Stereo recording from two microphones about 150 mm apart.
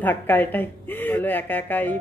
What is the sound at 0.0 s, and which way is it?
Speech, 10° left (ahead or behind).